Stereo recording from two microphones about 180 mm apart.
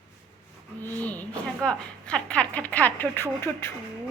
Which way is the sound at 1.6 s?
5° left (ahead or behind).